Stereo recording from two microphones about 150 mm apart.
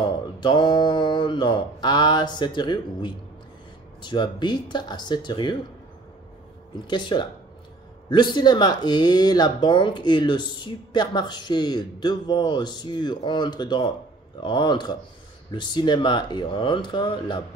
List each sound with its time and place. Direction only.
0.4 s mantra: 30° left (ahead or behind)
6.9 s mantra: 30° left (ahead or behind)
8.1 s speech: 30° left (ahead or behind)
14.4 s mantra: 30° left (ahead or behind)